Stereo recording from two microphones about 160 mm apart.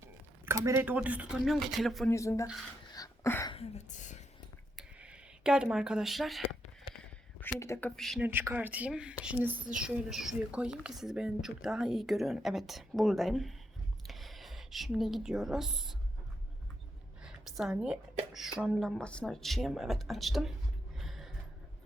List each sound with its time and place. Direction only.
0.0 s speech: 15° right (ahead or behind); by 2.0 s centre (ahead or behind)
2.0 s speech: 20° left (ahead or behind)
2.9 s a sound: 20° left (ahead or behind)
3.5 s speech: 40° left (ahead or behind)
4.8 s a sound: 5° right (ahead or behind)
7.6 s speech: 15° left (ahead or behind)
8.2 s a woman's voice: 15° right (ahead or behind)
17.2 s speech: 5° right (ahead or behind)
21.0 s music: centre (ahead or behind)